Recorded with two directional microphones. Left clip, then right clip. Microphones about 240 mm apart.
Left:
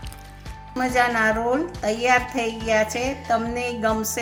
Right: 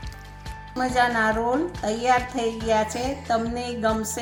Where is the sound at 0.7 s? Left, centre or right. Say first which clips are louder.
Left 1 dB; centre.